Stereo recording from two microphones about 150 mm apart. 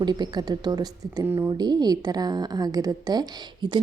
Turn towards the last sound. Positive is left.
turn(degrees=-30)  # may be behind; listen again after turning